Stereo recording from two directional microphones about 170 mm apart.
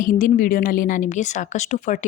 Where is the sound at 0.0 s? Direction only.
50° left (ahead or behind).